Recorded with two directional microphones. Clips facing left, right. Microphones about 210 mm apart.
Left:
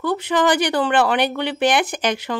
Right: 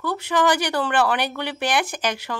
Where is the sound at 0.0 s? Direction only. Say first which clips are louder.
Left 3 dB; 20° left (ahead or behind).